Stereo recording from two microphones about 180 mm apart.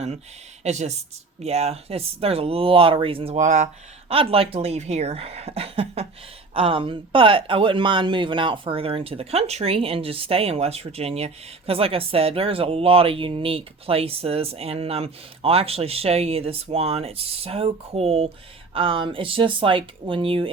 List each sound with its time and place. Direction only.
0.6 s speech: 40° right (ahead or behind)
4.1 s speech: 30° right (ahead or behind)